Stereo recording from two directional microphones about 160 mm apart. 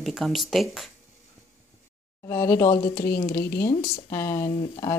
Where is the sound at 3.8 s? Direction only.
35° left (ahead or behind).